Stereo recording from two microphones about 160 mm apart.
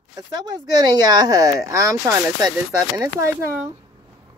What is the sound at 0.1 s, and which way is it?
Speech, 25° right (ahead or behind).